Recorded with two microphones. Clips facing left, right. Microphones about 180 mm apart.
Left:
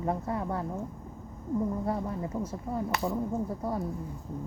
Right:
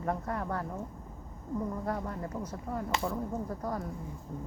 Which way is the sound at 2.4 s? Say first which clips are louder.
Left 3 dB; 25° left (ahead or behind).